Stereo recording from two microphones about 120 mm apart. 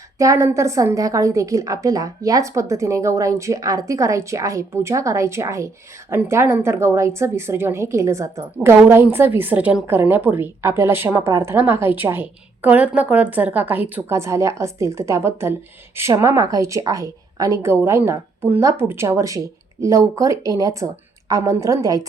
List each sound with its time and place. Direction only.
0.2 s a woman's voice: 25° right (ahead or behind)